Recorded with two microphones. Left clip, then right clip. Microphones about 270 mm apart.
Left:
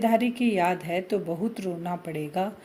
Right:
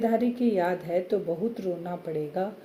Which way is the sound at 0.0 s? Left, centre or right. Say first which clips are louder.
Left 2 dB; left.